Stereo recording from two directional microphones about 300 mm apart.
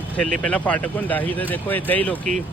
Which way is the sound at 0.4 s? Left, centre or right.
Centre.